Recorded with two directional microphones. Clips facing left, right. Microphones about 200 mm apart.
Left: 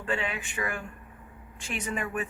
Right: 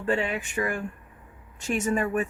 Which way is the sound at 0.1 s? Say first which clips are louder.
Right 5 dB; 40° right (ahead or behind).